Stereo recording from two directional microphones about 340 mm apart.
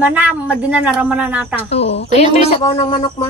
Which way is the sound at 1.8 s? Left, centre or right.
Left.